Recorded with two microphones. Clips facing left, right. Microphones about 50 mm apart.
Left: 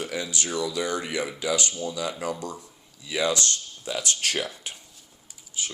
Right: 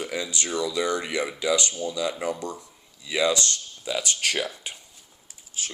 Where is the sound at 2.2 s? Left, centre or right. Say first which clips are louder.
Right 2 dB; right.